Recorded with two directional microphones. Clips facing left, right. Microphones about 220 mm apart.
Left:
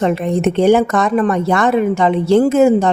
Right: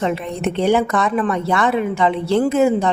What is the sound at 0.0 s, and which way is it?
Speech, 45° left (ahead or behind).